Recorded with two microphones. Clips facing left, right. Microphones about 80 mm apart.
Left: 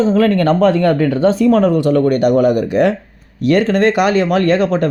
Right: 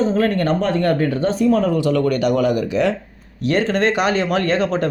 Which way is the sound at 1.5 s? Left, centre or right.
Left.